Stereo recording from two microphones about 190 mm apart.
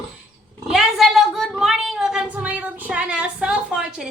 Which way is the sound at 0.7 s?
Centre (ahead or behind).